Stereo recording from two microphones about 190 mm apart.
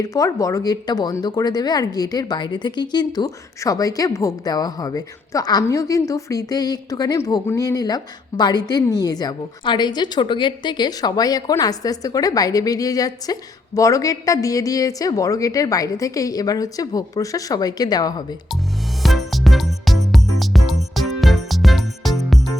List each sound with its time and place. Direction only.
0.0 s speech: 20° left (ahead or behind)
19.0 s music: centre (ahead or behind)